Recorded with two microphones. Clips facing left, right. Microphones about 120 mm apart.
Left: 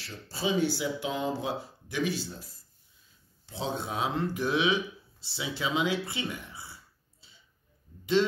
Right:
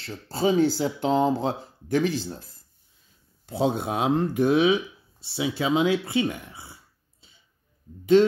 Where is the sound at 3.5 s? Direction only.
55° right (ahead or behind).